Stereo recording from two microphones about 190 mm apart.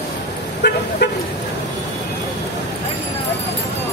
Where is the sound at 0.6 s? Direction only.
60° left (ahead or behind).